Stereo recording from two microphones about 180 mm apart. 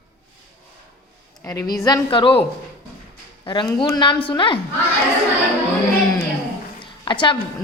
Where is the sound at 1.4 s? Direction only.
20° left (ahead or behind).